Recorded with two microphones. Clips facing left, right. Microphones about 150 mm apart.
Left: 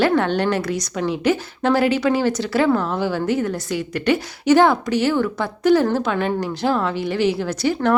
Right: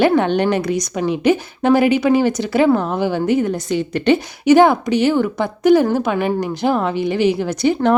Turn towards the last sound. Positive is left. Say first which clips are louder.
# right 4 dB
turn(degrees=-20)  # may be behind; listen again after turning